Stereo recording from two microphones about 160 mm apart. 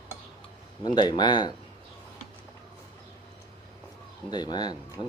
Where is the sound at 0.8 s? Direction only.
25° left (ahead or behind).